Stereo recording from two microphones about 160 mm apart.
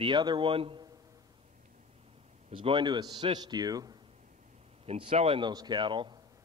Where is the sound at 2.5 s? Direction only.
30° right (ahead or behind).